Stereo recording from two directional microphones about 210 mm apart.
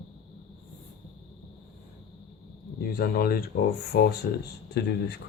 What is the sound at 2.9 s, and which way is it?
Speech, 45° left (ahead or behind).